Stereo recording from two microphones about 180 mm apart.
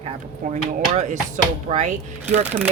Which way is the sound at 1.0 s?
40° right (ahead or behind).